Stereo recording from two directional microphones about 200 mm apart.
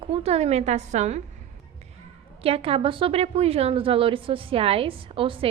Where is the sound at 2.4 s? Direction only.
30° right (ahead or behind).